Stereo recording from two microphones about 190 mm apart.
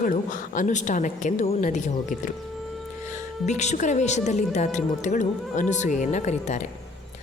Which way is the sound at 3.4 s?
35° left (ahead or behind).